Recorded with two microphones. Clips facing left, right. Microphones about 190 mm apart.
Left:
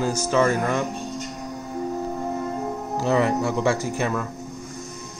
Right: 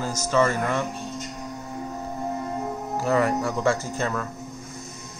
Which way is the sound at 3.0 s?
20° left (ahead or behind).